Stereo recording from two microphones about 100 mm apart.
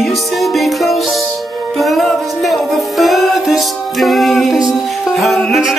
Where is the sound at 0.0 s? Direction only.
Centre (ahead or behind).